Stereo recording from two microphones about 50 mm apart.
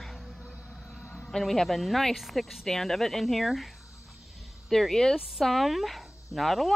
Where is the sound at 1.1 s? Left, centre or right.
Centre.